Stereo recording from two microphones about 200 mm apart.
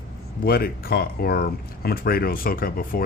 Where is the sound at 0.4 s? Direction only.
50° left (ahead or behind).